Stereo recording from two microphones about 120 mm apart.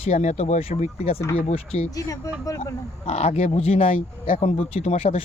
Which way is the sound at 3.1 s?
65° left (ahead or behind).